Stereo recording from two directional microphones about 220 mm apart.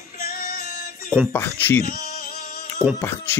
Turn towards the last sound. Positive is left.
turn(degrees=5)  # may be behind; listen again after turning